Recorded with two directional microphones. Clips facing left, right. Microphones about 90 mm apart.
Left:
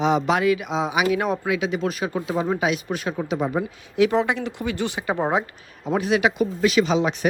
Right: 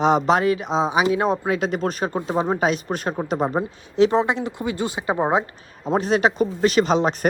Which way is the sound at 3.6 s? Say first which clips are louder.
Right 2 dB; 25° right (ahead or behind).